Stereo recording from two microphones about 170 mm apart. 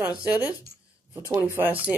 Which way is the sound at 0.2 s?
10° right (ahead or behind).